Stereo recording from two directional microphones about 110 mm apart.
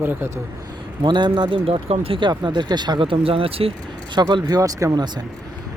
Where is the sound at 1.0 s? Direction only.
45° right (ahead or behind).